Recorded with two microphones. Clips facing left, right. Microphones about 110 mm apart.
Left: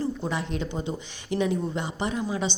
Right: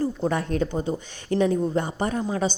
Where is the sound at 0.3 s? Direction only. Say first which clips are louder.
Right 5 dB; 45° right (ahead or behind).